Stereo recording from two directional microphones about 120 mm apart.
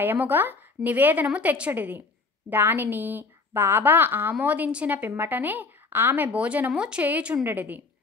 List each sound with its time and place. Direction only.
0.0 s a woman's voice: 15° right (ahead or behind)